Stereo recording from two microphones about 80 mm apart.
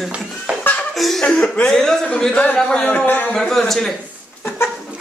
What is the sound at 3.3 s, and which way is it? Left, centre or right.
Speech, centre.